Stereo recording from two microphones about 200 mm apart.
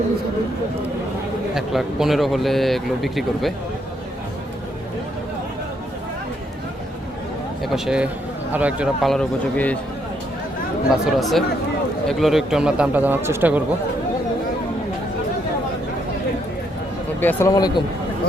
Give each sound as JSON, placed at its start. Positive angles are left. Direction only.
{"t": 1.5, "sound": "speech", "side_deg": 0}
{"t": 7.6, "sound": "speech", "side_deg": -5}
{"t": 10.8, "sound": "speech", "side_deg": 0}
{"t": 17.2, "sound": "speech", "side_deg": 10}